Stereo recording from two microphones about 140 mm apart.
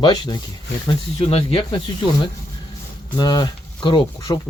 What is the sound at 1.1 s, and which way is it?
Speech, 40° left (ahead or behind).